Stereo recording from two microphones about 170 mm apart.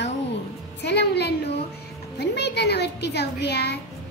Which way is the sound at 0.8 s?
75° left (ahead or behind).